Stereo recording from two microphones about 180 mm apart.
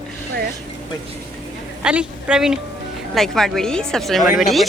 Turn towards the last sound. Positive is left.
turn(degrees=0)  # may be behind; listen again after turning